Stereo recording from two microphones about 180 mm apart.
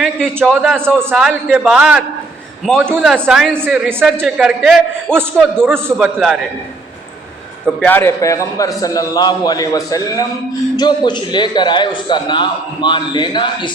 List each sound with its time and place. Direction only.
0.0 s a man's voice: 5° right (ahead or behind)
3.1 s a man's voice: centre (ahead or behind)
3.5 s a man's voice: 10° right (ahead or behind)
7.8 s a man's voice: 10° left (ahead or behind); by 13.7 s 25° left (ahead or behind)